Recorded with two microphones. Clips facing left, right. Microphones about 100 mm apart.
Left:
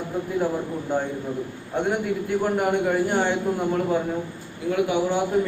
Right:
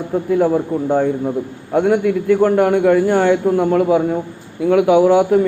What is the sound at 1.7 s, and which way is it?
A man's voice, 90° right.